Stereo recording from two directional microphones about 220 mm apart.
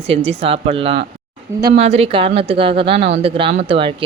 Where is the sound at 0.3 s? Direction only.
25° right (ahead or behind).